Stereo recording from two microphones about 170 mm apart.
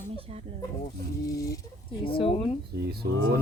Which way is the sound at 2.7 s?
70° right (ahead or behind).